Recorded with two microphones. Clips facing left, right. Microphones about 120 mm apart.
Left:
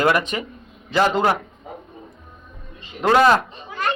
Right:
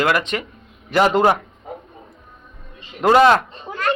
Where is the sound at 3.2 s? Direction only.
Centre (ahead or behind).